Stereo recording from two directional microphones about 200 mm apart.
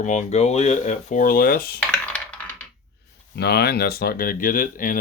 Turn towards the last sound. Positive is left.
turn(degrees=40)  # may be behind; listen again after turning